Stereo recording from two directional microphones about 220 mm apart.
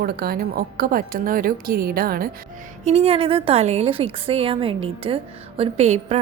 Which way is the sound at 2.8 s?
25° right (ahead or behind).